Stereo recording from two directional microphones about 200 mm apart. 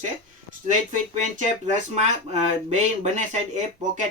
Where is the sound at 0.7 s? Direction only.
40° right (ahead or behind).